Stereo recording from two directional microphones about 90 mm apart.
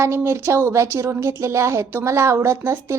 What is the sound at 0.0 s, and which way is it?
A woman's voice, 30° right (ahead or behind).